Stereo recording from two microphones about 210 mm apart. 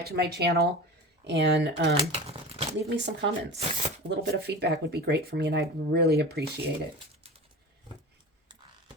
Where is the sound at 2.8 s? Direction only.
55° right (ahead or behind).